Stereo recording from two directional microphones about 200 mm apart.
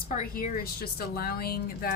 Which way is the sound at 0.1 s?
40° left (ahead or behind).